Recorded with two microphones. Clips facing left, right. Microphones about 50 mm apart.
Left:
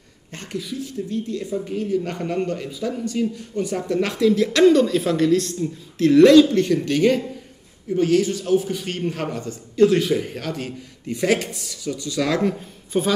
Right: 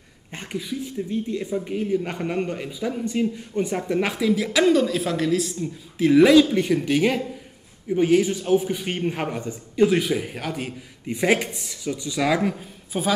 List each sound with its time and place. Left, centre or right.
0.3 s speech: centre